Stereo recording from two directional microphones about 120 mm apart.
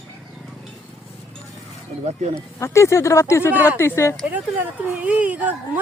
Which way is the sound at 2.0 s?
60° right (ahead or behind).